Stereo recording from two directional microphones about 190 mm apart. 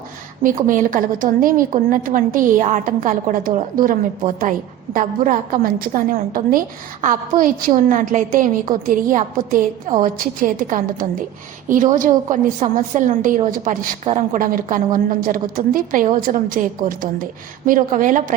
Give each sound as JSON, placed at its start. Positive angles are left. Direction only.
{"t": 0.4, "sound": "a woman's voice", "side_deg": -45}
{"t": 4.9, "sound": "a woman's voice", "side_deg": -45}